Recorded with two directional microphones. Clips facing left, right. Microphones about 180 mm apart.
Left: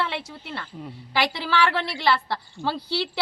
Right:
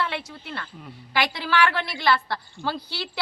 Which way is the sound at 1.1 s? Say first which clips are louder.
Even; 30° left (ahead or behind).